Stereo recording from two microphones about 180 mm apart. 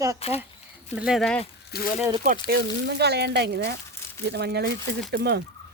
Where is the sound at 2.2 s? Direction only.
55° right (ahead or behind).